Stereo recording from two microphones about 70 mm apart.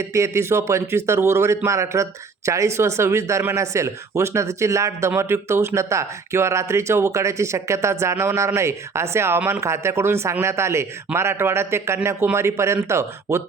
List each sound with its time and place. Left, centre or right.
0.0 s a man's voice: right